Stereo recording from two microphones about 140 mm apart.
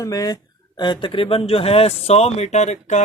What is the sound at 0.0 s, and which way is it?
Speech, 25° left (ahead or behind).